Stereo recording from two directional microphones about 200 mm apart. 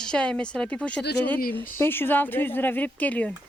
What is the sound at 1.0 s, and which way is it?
Speech, 55° left (ahead or behind).